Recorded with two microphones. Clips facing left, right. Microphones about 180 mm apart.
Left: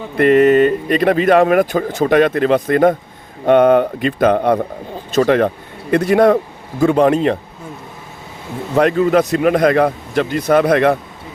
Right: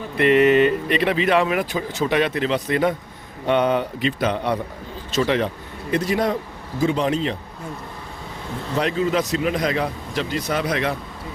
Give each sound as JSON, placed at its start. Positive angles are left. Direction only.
{"t": 0.2, "sound": "speech", "side_deg": 45}
{"t": 8.7, "sound": "speech", "side_deg": 55}